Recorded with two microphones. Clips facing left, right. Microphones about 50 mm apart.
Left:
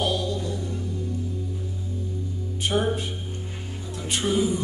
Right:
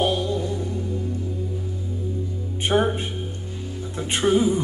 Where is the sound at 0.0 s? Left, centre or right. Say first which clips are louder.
Right 3 dB; right.